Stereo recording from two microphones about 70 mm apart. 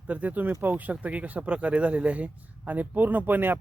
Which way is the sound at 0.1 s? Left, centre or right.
Right.